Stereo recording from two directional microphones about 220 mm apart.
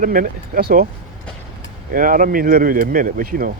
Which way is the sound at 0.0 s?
40° right (ahead or behind).